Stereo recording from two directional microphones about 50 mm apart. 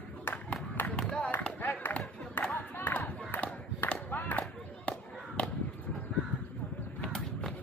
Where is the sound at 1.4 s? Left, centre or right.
Left.